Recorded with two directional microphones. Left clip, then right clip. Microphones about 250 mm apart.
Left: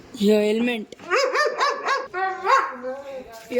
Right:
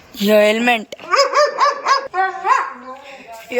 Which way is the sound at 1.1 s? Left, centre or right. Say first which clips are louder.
Right 7 dB; centre.